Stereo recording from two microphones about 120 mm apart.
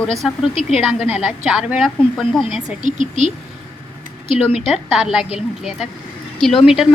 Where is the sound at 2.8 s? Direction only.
80° right.